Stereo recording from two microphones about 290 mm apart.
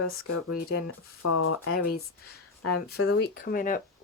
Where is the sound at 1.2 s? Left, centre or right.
Left.